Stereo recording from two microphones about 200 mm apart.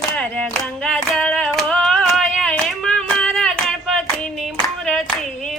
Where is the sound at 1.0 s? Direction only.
Centre (ahead or behind).